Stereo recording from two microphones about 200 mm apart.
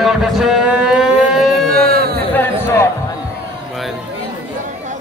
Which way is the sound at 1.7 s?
50° right (ahead or behind).